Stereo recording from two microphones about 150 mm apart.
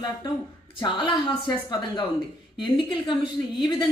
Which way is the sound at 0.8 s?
30° left (ahead or behind).